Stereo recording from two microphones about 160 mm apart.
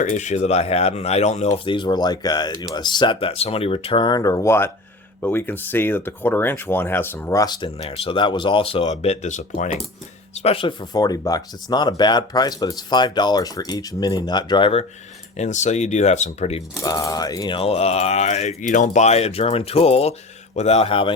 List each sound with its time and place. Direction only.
0.0 s speech: 50° left (ahead or behind)
10.3 s speech: 40° left (ahead or behind)
15.4 s speech: 45° left (ahead or behind)
16.8 s speech: 20° left (ahead or behind)
17.6 s speech: 40° left (ahead or behind)